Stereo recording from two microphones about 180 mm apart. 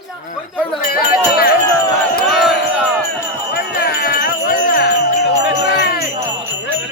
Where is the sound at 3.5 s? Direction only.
60° left (ahead or behind).